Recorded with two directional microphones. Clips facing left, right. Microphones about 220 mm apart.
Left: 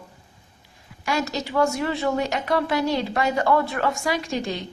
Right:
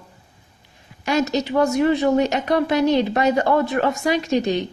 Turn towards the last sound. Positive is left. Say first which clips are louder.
# right 7 dB
turn(degrees=-20)  # may be behind; listen again after turning